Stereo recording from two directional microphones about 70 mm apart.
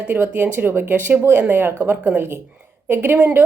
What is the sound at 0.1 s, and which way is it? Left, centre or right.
A woman's voice, right.